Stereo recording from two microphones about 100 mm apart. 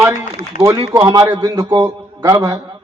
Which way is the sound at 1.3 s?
40° right (ahead or behind).